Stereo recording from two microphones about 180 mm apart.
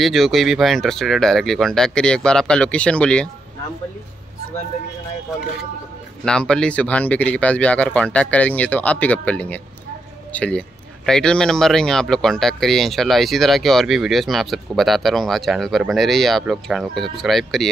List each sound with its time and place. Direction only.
0.0 s speech: centre (ahead or behind)
6.2 s speech: 5° left (ahead or behind)